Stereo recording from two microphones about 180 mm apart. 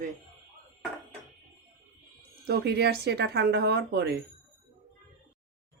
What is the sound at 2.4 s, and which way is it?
A woman's voice, 60° right (ahead or behind).